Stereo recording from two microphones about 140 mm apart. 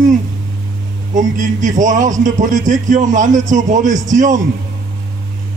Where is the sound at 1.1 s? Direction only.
65° right (ahead or behind).